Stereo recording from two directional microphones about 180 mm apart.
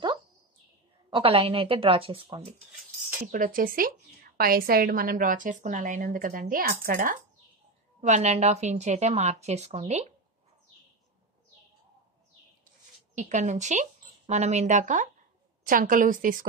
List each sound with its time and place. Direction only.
1.1 s speech: 30° right (ahead or behind)
3.3 s a woman's voice: 50° right (ahead or behind)
13.1 s a woman's voice: 40° right (ahead or behind)